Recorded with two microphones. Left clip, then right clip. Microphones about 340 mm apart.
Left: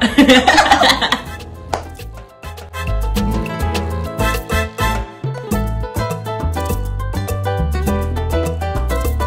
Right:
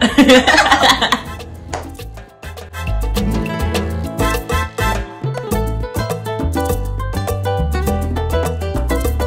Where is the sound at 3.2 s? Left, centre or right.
Right.